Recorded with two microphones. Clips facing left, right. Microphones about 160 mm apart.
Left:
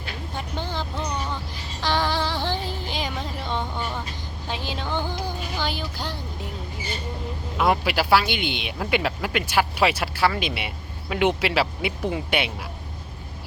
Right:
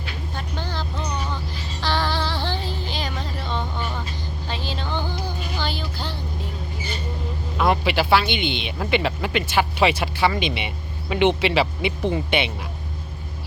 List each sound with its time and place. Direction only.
0.3 s vehicle: 20° left (ahead or behind)
1.8 s a sound: 15° left (ahead or behind)
4.4 s music: 15° left (ahead or behind)
7.5 s speech: 10° left (ahead or behind)